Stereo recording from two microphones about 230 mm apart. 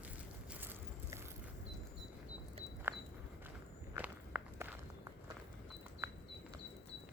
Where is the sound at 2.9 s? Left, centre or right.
Centre.